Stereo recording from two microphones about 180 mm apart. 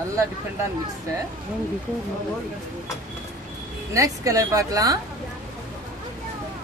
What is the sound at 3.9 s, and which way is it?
A woman's voice, 20° right (ahead or behind).